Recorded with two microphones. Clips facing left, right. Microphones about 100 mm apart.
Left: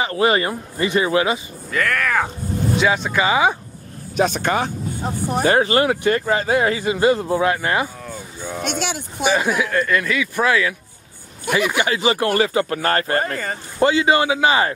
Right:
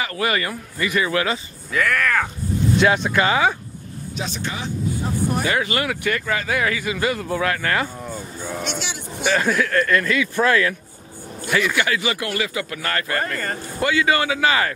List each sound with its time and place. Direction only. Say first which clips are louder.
0.0 s speech: left 5 dB; 25° left (ahead or behind)
1.7 s speech: even; centre (ahead or behind)
4.2 s speech: left 10 dB; 55° left (ahead or behind)
5.4 s speech: left 6 dB; 35° left (ahead or behind); by 7.9 s 20° left (ahead or behind)
8.6 s speech: left 5 dB; 50° left (ahead or behind)
9.2 s speech: left 1 dB; 10° left (ahead or behind)
12.0 s speech: left 7 dB; 35° left (ahead or behind)
13.7 s speech: left 4 dB; 25° left (ahead or behind)